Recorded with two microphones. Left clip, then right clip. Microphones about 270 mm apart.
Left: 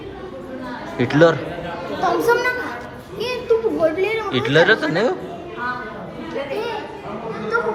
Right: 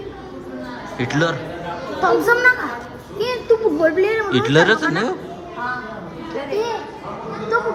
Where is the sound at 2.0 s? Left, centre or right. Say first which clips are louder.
Right 2 dB; right.